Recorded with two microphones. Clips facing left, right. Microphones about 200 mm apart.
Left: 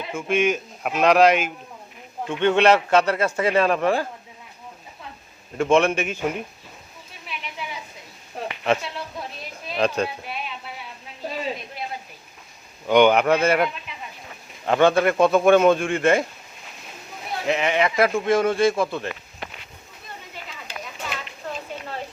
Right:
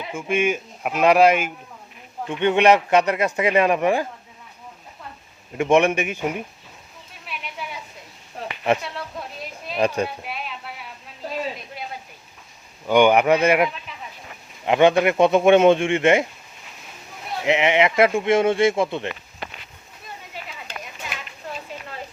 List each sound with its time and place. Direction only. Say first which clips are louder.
0.0 s a man's voice: left 1 dB; 15° right (ahead or behind)
5.5 s a man's voice: right 1 dB; 15° right (ahead or behind)
9.6 s a man's voice: right 1 dB; 5° right (ahead or behind)
12.9 s a man's voice: right 1 dB; 10° right (ahead or behind)
17.4 s speech: right 3 dB; 20° right (ahead or behind)